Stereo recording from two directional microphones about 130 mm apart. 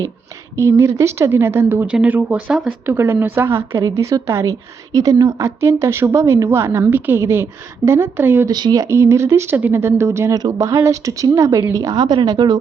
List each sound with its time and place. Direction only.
0.5 s a woman's voice: 20° right (ahead or behind)
8.4 s a woman's voice: 30° right (ahead or behind)